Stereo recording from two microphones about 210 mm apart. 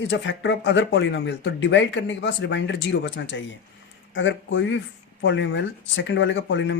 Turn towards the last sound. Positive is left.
turn(degrees=60)  # may be behind; listen again after turning